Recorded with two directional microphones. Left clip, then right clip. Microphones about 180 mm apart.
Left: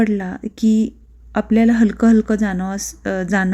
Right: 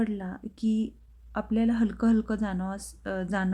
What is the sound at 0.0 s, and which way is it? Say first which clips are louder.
Speech: left 13 dB; 20° left (ahead or behind).